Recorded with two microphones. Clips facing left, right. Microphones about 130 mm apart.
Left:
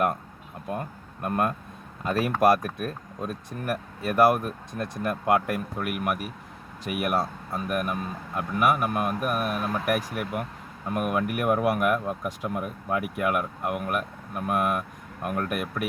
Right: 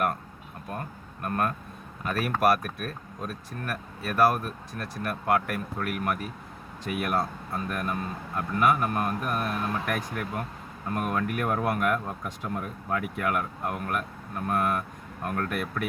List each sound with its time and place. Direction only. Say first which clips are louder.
1.2 s speech: left 2 dB; 20° left (ahead or behind)